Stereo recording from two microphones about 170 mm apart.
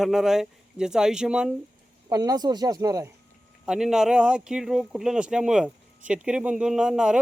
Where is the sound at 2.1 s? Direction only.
20° right (ahead or behind).